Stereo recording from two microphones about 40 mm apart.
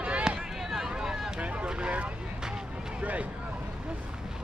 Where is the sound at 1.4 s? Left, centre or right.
Right.